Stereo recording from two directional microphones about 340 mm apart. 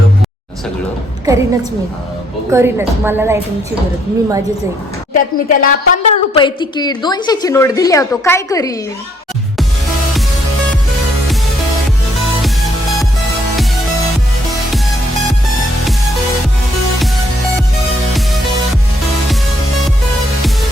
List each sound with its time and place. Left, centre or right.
1.2 s a woman's voice: centre
2.5 s a woman's voice: centre
5.1 s a woman's voice: left